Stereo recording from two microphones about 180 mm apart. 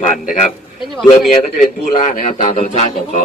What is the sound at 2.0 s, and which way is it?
Speech, 40° left (ahead or behind).